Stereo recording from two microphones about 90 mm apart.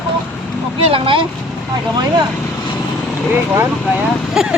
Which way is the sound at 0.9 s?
80° right.